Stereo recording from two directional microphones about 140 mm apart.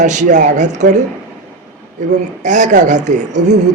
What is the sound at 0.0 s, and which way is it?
Speech, 60° right (ahead or behind).